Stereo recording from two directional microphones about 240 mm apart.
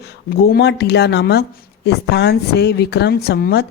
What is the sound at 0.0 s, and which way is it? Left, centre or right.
A woman's voice, left.